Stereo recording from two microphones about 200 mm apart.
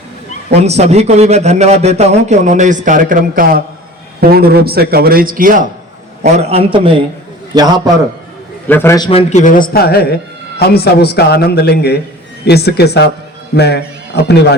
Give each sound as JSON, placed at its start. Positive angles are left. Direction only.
{"t": 0.5, "sound": "a man's voice", "side_deg": -30}
{"t": 6.2, "sound": "a man's voice", "side_deg": -35}
{"t": 8.6, "sound": "a man's voice", "side_deg": 10}
{"t": 9.0, "sound": "speech", "side_deg": 30}